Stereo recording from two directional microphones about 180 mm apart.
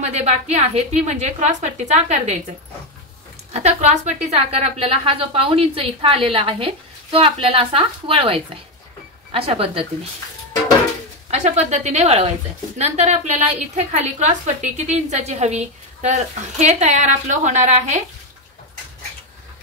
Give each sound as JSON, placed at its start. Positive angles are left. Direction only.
{"t": 0.0, "sound": "a woman's voice", "side_deg": -40}
{"t": 3.5, "sound": "a woman's voice", "side_deg": -40}
{"t": 11.2, "sound": "a woman's voice", "side_deg": -40}